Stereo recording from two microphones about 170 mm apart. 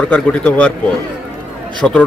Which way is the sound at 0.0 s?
10° left (ahead or behind).